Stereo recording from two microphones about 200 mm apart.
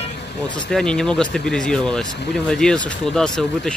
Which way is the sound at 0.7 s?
5° left (ahead or behind).